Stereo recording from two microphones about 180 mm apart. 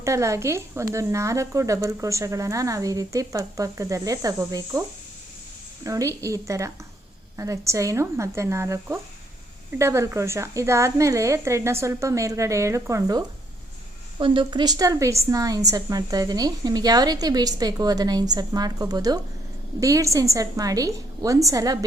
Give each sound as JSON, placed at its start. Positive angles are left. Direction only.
{"t": 0.0, "sound": "speech", "side_deg": -15}
{"t": 5.8, "sound": "a woman's voice", "side_deg": -15}